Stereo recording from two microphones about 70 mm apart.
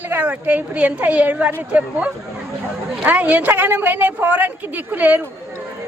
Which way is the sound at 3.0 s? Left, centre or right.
Right.